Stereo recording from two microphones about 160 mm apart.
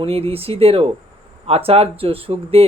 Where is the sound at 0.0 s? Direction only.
40° right (ahead or behind).